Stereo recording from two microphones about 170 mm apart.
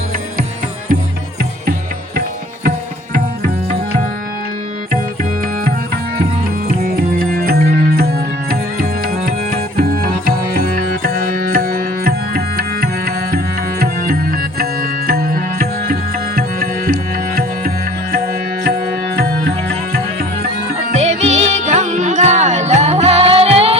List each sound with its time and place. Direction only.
6.7 s music: 60° right (ahead or behind)
18.6 s music: 70° right (ahead or behind)
20.9 s music: 40° right (ahead or behind)